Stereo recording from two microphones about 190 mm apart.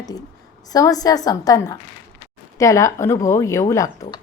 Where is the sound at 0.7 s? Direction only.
20° left (ahead or behind).